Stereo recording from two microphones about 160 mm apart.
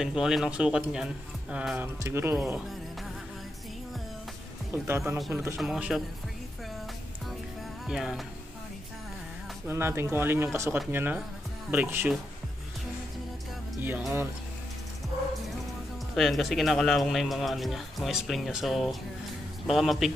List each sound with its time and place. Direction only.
0.0 s speech: 5° right (ahead or behind)
4.8 s speech: 15° right (ahead or behind)
5.6 s speech: 5° right (ahead or behind)
7.9 s speech: 5° right (ahead or behind)
9.7 s speech: 15° right (ahead or behind)
13.7 s speech: 10° right (ahead or behind)
16.2 s speech: centre (ahead or behind)